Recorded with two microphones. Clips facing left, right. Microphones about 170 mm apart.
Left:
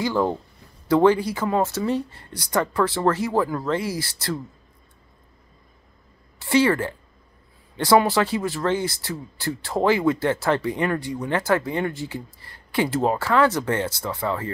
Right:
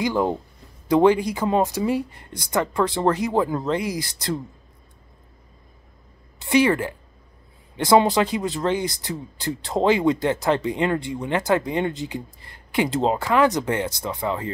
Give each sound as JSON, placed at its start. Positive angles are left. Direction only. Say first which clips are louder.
{"t": 0.0, "sound": "speech", "louder": "even", "side_deg": -15}
{"t": 6.4, "sound": "speech", "louder": "right 1 dB", "side_deg": -20}